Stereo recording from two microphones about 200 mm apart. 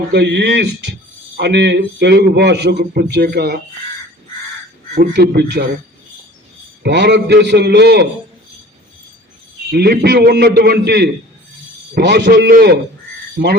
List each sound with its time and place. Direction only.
0.1 s a man's voice: 60° right (ahead or behind)
4.9 s a man's voice: 55° right (ahead or behind)
6.8 s a man's voice: 60° right (ahead or behind)
9.7 s a man's voice: 50° right (ahead or behind)